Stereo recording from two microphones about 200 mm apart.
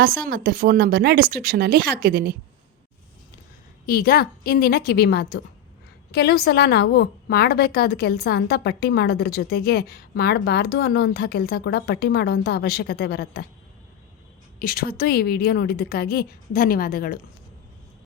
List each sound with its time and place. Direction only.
0.0 s speech: 50° right (ahead or behind)
3.8 s a woman's voice: 50° left (ahead or behind)
14.6 s a woman's voice: 45° left (ahead or behind)